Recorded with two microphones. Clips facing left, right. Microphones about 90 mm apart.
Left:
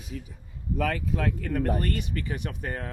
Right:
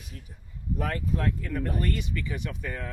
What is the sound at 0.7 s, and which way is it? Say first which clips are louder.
Speech: left 3 dB; 90° left.